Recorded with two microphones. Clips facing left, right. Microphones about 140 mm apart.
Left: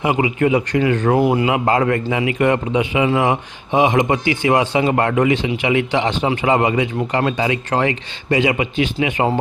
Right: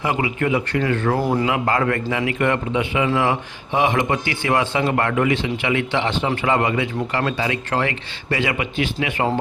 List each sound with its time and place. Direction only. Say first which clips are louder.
0.0 s a man's voice: left 5 dB; 20° left (ahead or behind)